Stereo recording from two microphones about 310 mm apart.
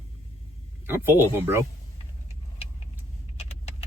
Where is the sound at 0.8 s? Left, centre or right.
Centre.